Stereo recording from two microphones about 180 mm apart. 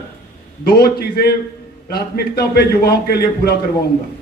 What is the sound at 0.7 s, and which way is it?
A man's voice, 60° left (ahead or behind).